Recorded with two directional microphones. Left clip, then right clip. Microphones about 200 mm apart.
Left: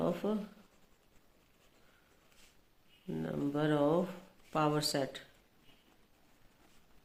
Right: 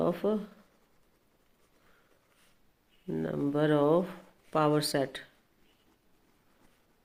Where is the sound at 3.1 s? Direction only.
40° right (ahead or behind).